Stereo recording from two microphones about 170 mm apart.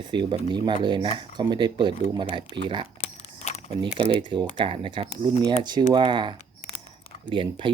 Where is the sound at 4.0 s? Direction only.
30° right (ahead or behind).